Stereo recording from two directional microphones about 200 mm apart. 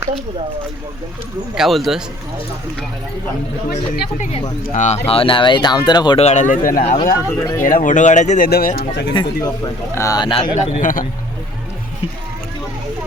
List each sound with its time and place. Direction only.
1.5 s speech: centre (ahead or behind)
4.2 s speech: 30° left (ahead or behind)
7.3 s speech: 15° left (ahead or behind)
7.6 s speech: 45° left (ahead or behind)
9.1 s speech: 20° left (ahead or behind)
10.8 s speech: 40° left (ahead or behind)